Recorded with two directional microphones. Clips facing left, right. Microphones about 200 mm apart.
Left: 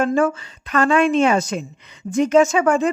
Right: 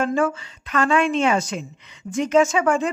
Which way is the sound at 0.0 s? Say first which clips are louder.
Left 3 dB; 40° left (ahead or behind).